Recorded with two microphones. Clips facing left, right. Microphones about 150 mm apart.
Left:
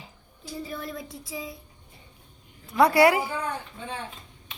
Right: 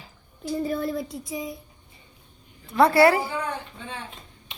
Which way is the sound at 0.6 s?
45° right (ahead or behind).